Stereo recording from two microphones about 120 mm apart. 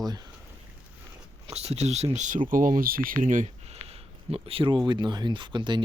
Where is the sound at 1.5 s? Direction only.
65° right (ahead or behind).